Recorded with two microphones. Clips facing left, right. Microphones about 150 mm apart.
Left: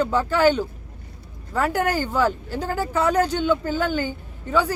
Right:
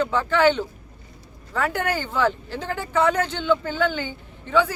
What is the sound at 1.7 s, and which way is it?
Speech, 40° left (ahead or behind).